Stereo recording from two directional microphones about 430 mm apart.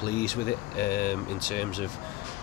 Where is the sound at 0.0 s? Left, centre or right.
Left.